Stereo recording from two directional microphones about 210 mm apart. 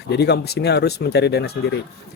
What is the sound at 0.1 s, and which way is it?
Speech, 50° left (ahead or behind).